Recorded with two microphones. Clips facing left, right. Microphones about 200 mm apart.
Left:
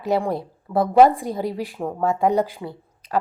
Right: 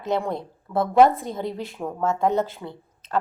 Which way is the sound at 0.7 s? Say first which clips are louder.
Left 2 dB; 20° left (ahead or behind).